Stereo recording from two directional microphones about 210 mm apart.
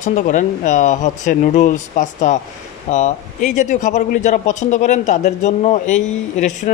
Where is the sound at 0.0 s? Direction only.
35° left (ahead or behind).